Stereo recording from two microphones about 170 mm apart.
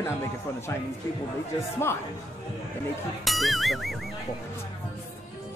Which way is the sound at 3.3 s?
Centre (ahead or behind).